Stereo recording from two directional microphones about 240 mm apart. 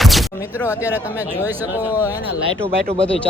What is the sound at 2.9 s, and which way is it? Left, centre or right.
Speech, right.